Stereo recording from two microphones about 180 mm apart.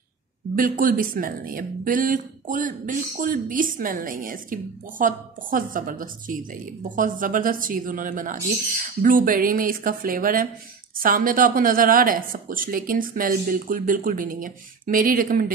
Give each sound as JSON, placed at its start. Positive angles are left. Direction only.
{"t": 0.6, "sound": "speech", "side_deg": -50}